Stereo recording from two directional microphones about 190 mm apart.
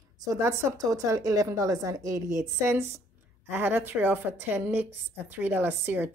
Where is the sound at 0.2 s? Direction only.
15° right (ahead or behind).